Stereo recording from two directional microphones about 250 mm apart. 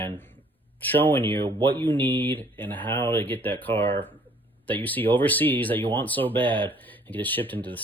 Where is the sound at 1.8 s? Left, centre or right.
Centre.